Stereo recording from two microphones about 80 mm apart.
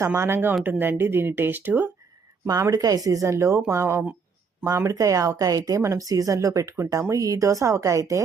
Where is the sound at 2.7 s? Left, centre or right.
Right.